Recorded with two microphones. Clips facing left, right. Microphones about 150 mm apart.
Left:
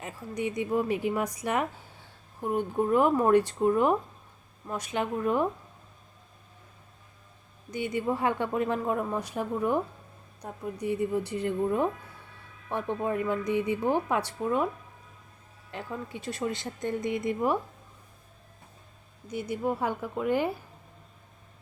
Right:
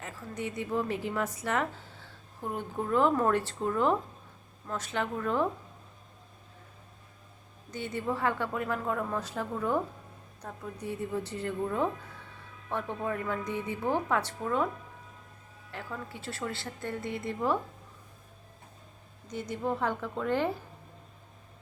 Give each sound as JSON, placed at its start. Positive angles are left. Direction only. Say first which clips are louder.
{"t": 0.0, "sound": "a woman's voice", "louder": "left 4 dB", "side_deg": 15}
{"t": 7.7, "sound": "a woman's voice", "louder": "left 4 dB", "side_deg": 15}
{"t": 15.7, "sound": "a woman's voice", "louder": "left 3 dB", "side_deg": 20}
{"t": 19.3, "sound": "a woman's voice", "louder": "left 3 dB", "side_deg": 10}